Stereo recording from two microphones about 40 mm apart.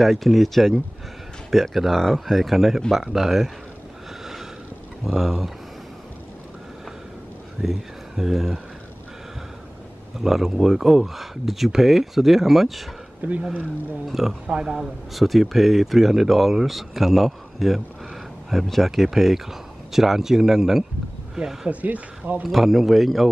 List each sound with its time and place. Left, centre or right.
0.0 s speech: centre
5.0 s speech: centre
7.6 s speech: centre
10.1 s speech: centre
13.4 s speech: right
14.0 s speech: centre
21.6 s speech: right
22.4 s speech: centre